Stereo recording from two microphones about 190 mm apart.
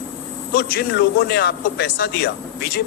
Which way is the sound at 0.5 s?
55° left (ahead or behind).